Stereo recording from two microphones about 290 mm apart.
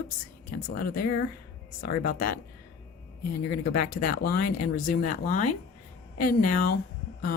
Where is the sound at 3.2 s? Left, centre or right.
Left.